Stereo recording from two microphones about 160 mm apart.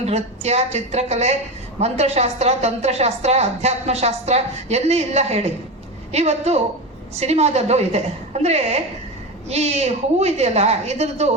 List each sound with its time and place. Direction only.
0.0 s a woman's voice: 40° right (ahead or behind)